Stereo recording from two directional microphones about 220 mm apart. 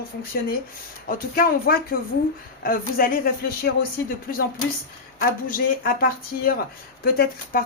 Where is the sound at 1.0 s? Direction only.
40° left (ahead or behind).